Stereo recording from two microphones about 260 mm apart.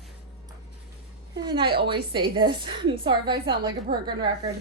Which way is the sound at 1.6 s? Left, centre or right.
Right.